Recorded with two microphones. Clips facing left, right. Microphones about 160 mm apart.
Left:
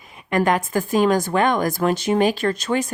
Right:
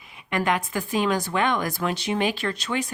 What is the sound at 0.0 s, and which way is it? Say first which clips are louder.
Speech: left 6 dB; 45° left (ahead or behind).